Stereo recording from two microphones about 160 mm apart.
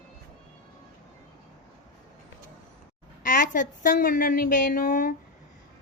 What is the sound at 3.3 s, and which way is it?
Speech, 55° left (ahead or behind).